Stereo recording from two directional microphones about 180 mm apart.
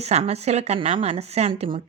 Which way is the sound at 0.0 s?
35° right (ahead or behind).